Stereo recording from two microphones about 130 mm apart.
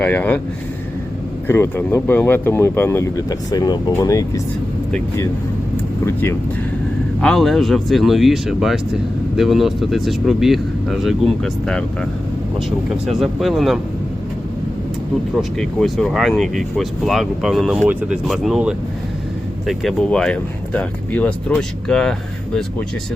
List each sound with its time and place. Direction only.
0.0 s speech: 15° left (ahead or behind)
1.5 s speech: 20° left (ahead or behind)
5.7 s vehicle: 15° left (ahead or behind)
7.2 s speech: centre (ahead or behind)
15.4 s speech: 5° left (ahead or behind)